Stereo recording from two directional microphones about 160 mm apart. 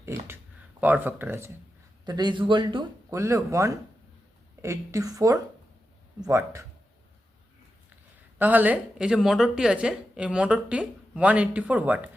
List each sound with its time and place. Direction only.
0.0 s a woman's voice: 15° right (ahead or behind)
2.0 s speech: 25° right (ahead or behind)
8.4 s a woman's voice: 10° right (ahead or behind)